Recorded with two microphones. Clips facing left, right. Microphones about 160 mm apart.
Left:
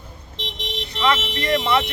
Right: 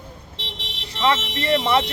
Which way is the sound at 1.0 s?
25° right (ahead or behind).